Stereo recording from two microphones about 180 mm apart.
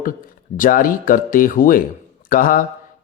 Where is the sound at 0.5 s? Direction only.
50° left (ahead or behind).